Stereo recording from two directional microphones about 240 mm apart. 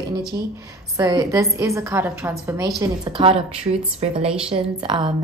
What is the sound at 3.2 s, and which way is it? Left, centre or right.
A woman's voice, right.